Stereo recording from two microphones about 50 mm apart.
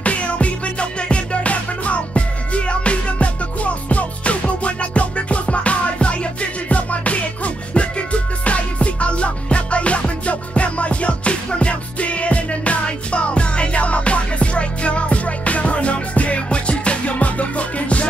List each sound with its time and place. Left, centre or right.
0.0 s music: left